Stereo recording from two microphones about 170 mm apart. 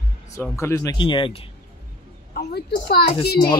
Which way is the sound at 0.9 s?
30° left (ahead or behind).